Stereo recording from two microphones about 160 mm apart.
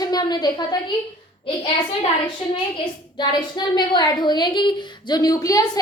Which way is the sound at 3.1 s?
25° left (ahead or behind).